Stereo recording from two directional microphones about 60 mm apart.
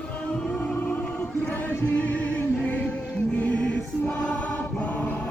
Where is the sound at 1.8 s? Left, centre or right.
Left.